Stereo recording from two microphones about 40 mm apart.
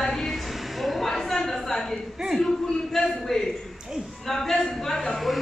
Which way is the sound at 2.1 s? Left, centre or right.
Centre.